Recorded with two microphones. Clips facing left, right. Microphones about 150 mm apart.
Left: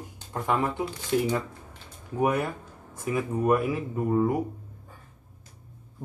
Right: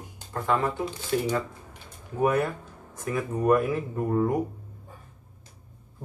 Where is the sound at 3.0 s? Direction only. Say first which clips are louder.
Right 1 dB; 10° left (ahead or behind).